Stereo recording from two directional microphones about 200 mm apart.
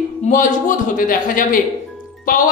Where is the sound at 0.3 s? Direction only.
40° left (ahead or behind).